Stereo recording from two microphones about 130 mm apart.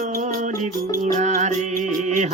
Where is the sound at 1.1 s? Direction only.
65° right (ahead or behind).